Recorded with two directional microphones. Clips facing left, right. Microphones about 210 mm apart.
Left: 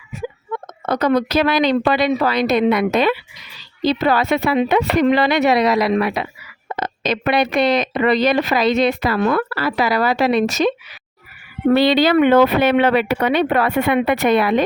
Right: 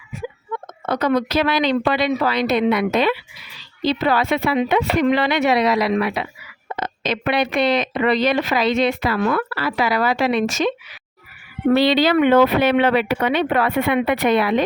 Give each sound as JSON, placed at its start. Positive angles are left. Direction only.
{"t": 0.9, "sound": "speech", "side_deg": 40}
{"t": 11.7, "sound": "speech", "side_deg": 50}